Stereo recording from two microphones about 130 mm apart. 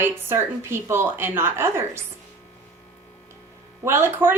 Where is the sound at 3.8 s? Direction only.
15° right (ahead or behind).